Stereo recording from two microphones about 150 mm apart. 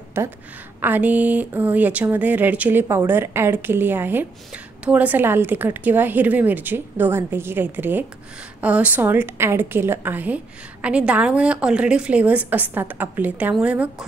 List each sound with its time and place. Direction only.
0.2 s a woman's voice: 15° right (ahead or behind)